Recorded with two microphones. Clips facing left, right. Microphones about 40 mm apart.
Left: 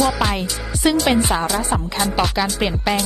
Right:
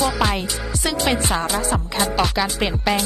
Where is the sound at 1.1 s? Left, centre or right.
Centre.